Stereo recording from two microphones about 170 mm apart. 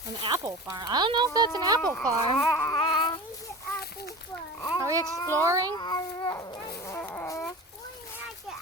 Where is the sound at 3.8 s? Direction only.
70° left (ahead or behind).